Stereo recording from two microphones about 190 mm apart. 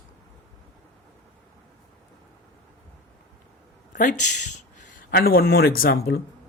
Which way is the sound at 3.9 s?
40° left (ahead or behind).